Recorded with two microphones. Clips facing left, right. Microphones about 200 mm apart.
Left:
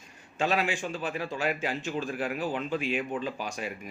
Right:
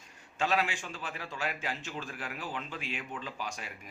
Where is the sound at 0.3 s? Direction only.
15° left (ahead or behind).